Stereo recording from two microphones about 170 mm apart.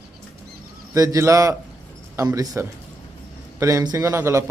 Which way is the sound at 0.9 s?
20° right (ahead or behind).